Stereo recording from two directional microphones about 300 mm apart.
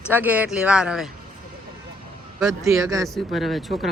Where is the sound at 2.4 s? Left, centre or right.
Centre.